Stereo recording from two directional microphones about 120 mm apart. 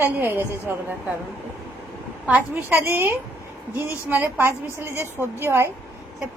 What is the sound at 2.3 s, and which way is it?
A woman's voice, 15° right (ahead or behind).